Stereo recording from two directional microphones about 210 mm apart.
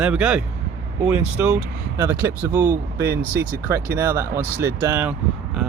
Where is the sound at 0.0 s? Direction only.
5° right (ahead or behind).